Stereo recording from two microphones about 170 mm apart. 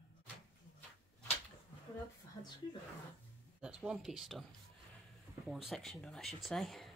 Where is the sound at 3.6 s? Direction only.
5° right (ahead or behind).